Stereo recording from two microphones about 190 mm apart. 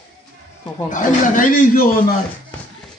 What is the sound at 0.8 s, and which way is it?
Speech, 45° left (ahead or behind).